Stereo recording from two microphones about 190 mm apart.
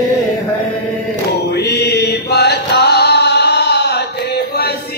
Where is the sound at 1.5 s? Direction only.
60° left (ahead or behind).